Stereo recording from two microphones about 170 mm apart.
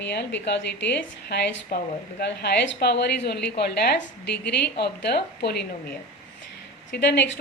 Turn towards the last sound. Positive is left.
turn(degrees=90)